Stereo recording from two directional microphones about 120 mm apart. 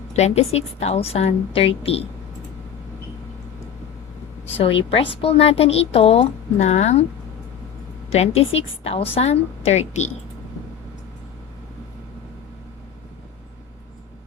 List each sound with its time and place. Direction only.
0.1 s a woman's voice: 65° left (ahead or behind)
4.4 s a woman's voice: 55° left (ahead or behind)
8.1 s a woman's voice: 60° left (ahead or behind)